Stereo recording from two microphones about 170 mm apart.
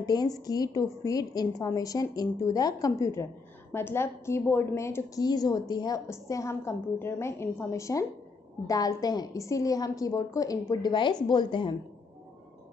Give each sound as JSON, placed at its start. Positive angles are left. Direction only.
{"t": 0.0, "sound": "a woman's voice", "side_deg": 20}